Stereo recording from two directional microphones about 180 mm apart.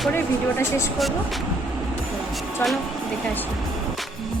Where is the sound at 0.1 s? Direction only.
15° left (ahead or behind).